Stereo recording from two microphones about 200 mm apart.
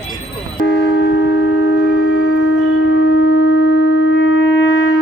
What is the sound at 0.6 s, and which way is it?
Shofar, 55° left (ahead or behind).